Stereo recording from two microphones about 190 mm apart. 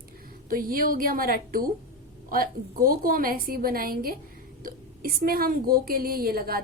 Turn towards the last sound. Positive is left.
turn(degrees=-50)  # may be behind; listen again after turning